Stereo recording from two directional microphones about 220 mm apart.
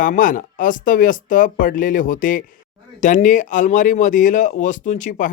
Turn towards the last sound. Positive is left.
turn(degrees=35)  # may be behind; listen again after turning